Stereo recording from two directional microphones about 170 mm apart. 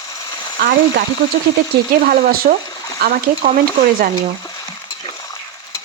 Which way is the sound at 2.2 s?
60° right (ahead or behind).